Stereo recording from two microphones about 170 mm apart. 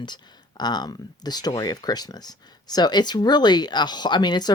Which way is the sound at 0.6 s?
25° left (ahead or behind).